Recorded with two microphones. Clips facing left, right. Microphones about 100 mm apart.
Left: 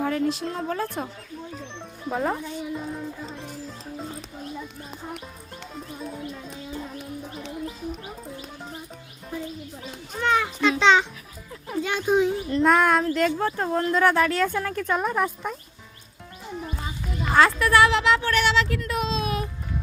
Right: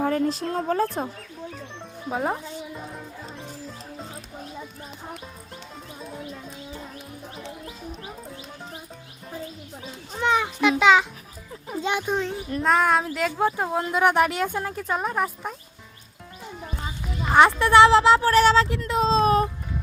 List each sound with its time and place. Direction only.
0.0 s speech: 40° right (ahead or behind)
2.0 s speech: 15° right (ahead or behind)
2.7 s music: centre (ahead or behind)
10.2 s a sound: 20° right (ahead or behind)
11.8 s speech: 20° right (ahead or behind)
12.0 s speech: 5° left (ahead or behind)
12.4 s speech: 5° right (ahead or behind)
14.8 s speech: 5° right (ahead or behind)
17.3 s speech: 20° right (ahead or behind)
18.7 s a sound: 25° right (ahead or behind)